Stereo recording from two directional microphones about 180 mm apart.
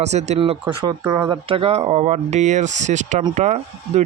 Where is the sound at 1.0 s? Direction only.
10° right (ahead or behind).